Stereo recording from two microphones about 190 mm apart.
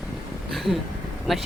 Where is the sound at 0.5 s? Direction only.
Centre (ahead or behind).